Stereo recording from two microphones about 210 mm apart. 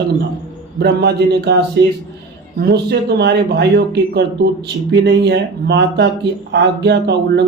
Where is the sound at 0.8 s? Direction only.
50° right (ahead or behind).